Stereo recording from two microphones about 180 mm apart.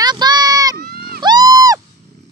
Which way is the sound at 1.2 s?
20° right (ahead or behind).